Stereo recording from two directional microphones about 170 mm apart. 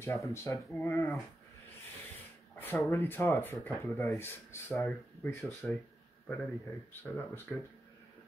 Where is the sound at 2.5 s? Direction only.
10° left (ahead or behind).